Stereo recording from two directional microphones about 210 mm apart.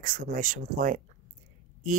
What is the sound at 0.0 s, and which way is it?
Speech, 40° right (ahead or behind).